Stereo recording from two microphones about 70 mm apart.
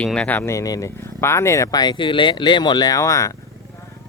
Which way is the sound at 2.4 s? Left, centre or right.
Left.